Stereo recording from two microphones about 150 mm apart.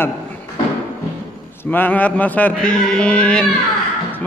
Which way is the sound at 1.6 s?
10° left (ahead or behind).